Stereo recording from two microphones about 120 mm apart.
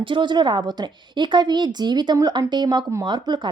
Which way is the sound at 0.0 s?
45° right (ahead or behind).